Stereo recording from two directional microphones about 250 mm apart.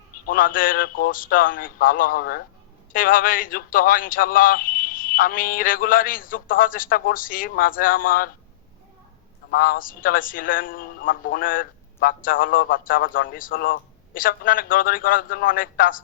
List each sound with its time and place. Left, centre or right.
0.3 s a man's voice: left
9.5 s a man's voice: left